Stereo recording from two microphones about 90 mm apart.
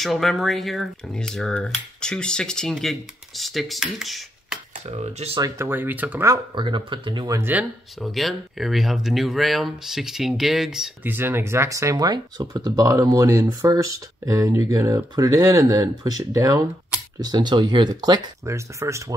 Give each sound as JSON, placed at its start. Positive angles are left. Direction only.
{"t": 0.0, "sound": "speech", "side_deg": 0}
{"t": 5.6, "sound": "speech", "side_deg": -20}
{"t": 6.5, "sound": "speech", "side_deg": -60}
{"t": 8.0, "sound": "speech", "side_deg": 0}
{"t": 11.1, "sound": "speech", "side_deg": -20}
{"t": 12.1, "sound": "speech", "side_deg": -50}
{"t": 17.2, "sound": "speech", "side_deg": -55}
{"t": 18.4, "sound": "speech", "side_deg": -35}